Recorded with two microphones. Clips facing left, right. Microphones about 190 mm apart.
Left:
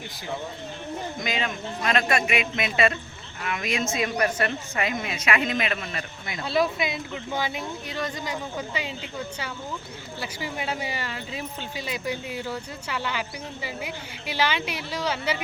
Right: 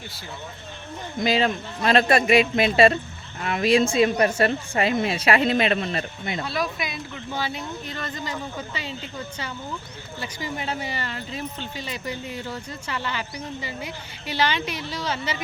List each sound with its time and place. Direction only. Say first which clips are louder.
1.2 s a woman's voice: right 10 dB; 35° right (ahead or behind)
6.4 s speech: left 6 dB; 25° left (ahead or behind)